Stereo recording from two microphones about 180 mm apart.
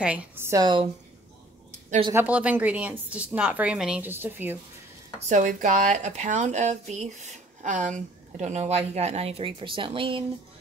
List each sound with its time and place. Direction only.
0.0 s a woman's voice: 5° right (ahead or behind); by 0.8 s 25° right (ahead or behind)
1.9 s speech: 30° right (ahead or behind)
2.1 s a woman's voice: 10° right (ahead or behind)
5.3 s speech: 45° right (ahead or behind); by 10.2 s 30° right (ahead or behind)